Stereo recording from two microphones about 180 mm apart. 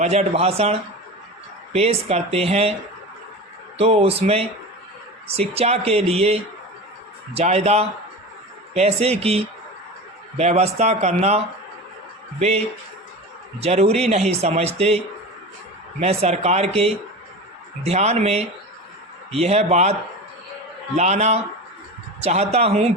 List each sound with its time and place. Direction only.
0.0 s speech: 35° right (ahead or behind)
3.8 s speech: 35° right (ahead or behind)